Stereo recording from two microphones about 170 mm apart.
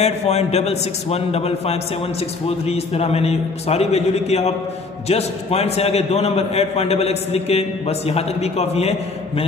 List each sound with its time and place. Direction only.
0.0 s a man's voice: 40° left (ahead or behind)